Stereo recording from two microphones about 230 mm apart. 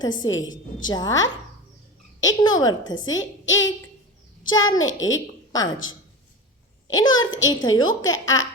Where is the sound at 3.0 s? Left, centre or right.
Left.